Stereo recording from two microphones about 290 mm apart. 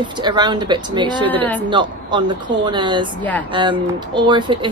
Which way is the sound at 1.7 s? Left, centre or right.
Centre.